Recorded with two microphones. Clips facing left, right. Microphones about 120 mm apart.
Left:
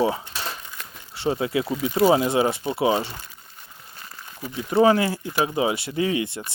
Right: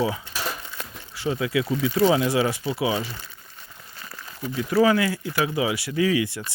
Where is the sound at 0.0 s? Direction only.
35° left (ahead or behind).